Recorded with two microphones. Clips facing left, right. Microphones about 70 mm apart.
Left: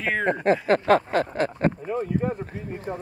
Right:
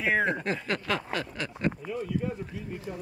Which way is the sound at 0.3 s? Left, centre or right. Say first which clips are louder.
Left 9 dB; left.